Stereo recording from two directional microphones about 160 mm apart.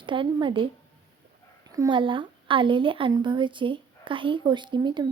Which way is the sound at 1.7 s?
25° right (ahead or behind).